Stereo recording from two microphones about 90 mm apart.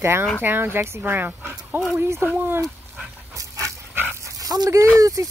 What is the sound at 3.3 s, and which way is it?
Dog, 35° right (ahead or behind).